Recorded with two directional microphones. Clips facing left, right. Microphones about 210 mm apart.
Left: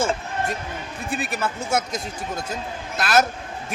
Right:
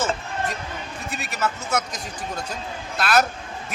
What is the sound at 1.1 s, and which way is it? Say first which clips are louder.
Speech: left 2 dB; 30° left (ahead or behind).